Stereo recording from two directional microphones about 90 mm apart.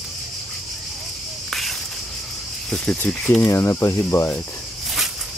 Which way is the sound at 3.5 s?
30° left (ahead or behind).